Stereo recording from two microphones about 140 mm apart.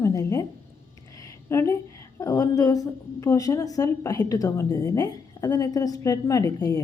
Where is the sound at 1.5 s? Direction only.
20° left (ahead or behind).